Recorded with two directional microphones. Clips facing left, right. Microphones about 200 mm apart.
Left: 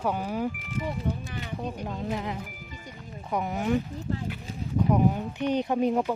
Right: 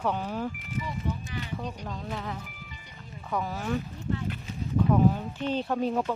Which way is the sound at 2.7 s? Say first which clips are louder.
Left 7 dB; 45° left (ahead or behind).